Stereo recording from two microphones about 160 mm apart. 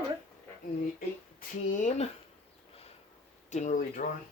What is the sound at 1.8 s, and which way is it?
Speech, 50° left (ahead or behind).